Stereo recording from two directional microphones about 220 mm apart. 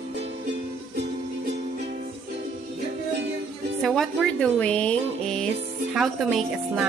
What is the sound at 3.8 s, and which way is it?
Speech, centre (ahead or behind).